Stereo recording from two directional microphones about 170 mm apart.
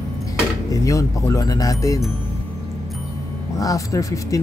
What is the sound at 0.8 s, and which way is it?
Speech, 20° left (ahead or behind).